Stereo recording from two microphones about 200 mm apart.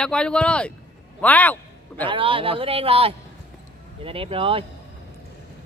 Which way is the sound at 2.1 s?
25° right (ahead or behind).